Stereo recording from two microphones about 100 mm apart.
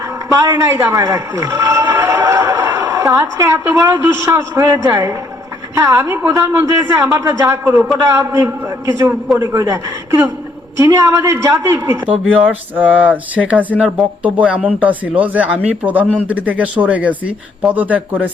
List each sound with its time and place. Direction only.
0.3 s speech: 35° right (ahead or behind)
0.9 s a sound: 30° right (ahead or behind)
4.0 s a man's voice: 25° right (ahead or behind)